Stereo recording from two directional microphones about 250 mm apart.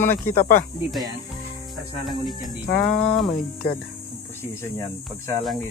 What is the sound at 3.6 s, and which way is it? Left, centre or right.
Speech, left.